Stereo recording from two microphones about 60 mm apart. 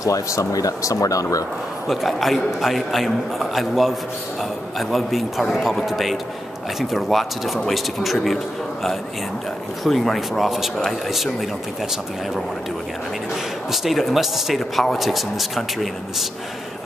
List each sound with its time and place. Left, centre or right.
0.0 s speech: left
1.9 s speech: centre
9.8 s speech: centre
13.7 s speech: centre